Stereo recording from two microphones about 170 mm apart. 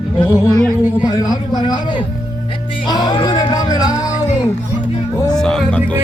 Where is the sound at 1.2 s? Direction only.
20° left (ahead or behind).